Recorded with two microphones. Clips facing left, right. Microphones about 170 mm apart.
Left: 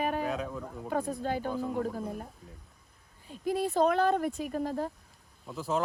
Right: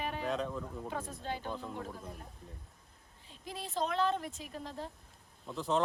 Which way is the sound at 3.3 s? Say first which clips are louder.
Left 12 dB; 55° left (ahead or behind).